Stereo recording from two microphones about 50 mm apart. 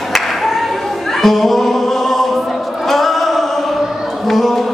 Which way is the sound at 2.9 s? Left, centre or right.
Centre.